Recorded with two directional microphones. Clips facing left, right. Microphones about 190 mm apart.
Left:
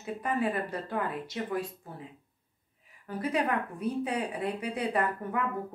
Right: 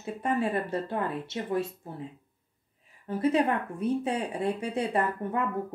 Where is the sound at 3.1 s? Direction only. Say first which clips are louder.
Right 5 dB; 25° right (ahead or behind).